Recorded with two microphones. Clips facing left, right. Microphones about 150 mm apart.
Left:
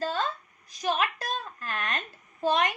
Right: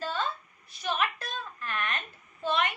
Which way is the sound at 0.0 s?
40° left (ahead or behind).